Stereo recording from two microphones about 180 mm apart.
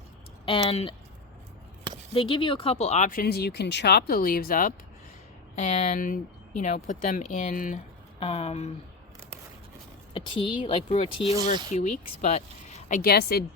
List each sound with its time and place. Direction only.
0.4 s speech: 30° left (ahead or behind)
2.1 s speech: 30° left (ahead or behind); by 4.7 s 50° left (ahead or behind)
5.5 s speech: 40° left (ahead or behind)
8.2 s speech: 35° left (ahead or behind)
10.2 s speech: 30° left (ahead or behind)
13.0 s speech: 60° left (ahead or behind)